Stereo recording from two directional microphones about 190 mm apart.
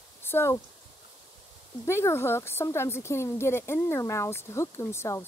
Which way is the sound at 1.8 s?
15° left (ahead or behind).